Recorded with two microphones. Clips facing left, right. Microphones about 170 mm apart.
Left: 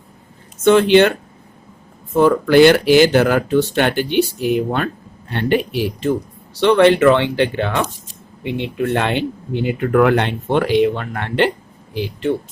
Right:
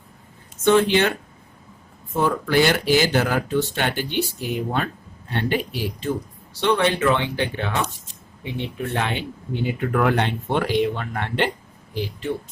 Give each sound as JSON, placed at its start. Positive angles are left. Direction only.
{"t": 0.6, "sound": "speech", "side_deg": 80}
{"t": 2.1, "sound": "speech", "side_deg": 85}